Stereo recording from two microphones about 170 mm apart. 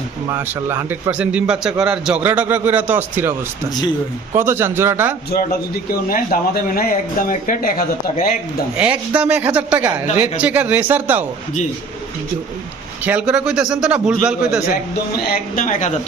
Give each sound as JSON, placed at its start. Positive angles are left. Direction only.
{"t": 0.3, "sound": "a man's voice", "side_deg": -15}
{"t": 4.4, "sound": "a man's voice", "side_deg": -15}
{"t": 5.3, "sound": "a man's voice", "side_deg": 60}
{"t": 8.8, "sound": "a man's voice", "side_deg": -10}
{"t": 13.1, "sound": "speech", "side_deg": -5}
{"t": 14.9, "sound": "speech", "side_deg": 55}